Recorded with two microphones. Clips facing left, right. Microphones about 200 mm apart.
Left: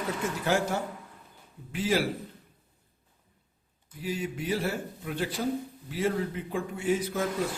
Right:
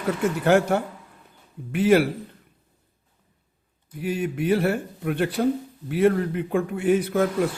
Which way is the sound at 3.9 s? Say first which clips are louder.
Right 7 dB; 60° right (ahead or behind).